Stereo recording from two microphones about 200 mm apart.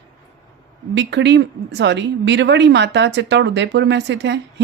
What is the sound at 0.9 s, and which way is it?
Speech, 60° right (ahead or behind).